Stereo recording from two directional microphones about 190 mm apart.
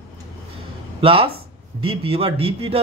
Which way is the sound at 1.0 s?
25° right (ahead or behind).